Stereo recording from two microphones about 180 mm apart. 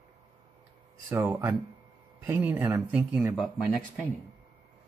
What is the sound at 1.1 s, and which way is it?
Speech, 15° right (ahead or behind).